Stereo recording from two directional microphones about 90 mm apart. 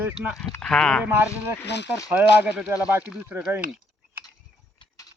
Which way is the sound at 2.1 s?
10° right (ahead or behind).